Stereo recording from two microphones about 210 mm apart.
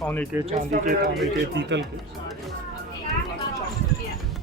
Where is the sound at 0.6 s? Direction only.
45° right (ahead or behind).